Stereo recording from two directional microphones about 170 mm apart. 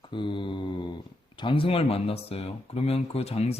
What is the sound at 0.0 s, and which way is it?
A man's voice, 30° left (ahead or behind).